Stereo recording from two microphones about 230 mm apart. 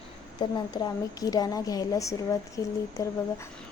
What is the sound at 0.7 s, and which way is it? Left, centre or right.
Speech, centre.